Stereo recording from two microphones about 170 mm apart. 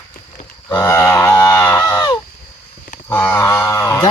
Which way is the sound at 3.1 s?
10° left (ahead or behind).